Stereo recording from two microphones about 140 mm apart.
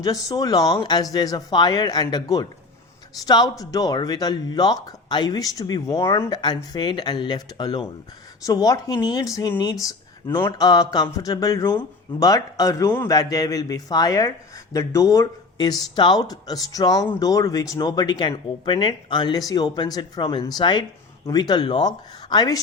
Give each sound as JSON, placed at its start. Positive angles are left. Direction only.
{"t": 0.0, "sound": "speech", "side_deg": 25}
{"t": 9.8, "sound": "speech", "side_deg": 15}
{"t": 10.6, "sound": "speech", "side_deg": 25}